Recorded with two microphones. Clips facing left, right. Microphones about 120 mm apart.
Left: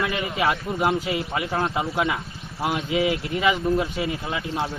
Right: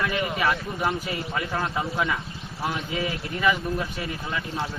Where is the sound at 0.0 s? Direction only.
20° left (ahead or behind).